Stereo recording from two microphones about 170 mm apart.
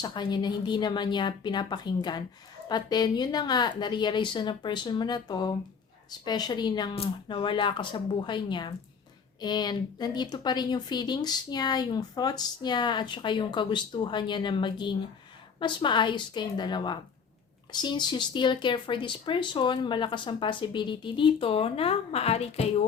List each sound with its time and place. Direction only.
0.0 s speech: 25° left (ahead or behind)